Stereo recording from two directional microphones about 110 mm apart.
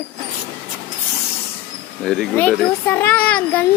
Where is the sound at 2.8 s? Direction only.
20° left (ahead or behind).